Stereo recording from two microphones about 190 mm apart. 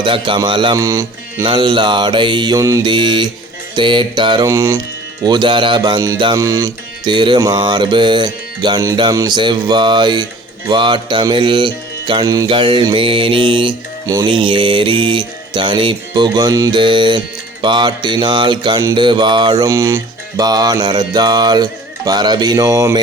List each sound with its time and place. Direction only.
0.0 s music: 25° right (ahead or behind)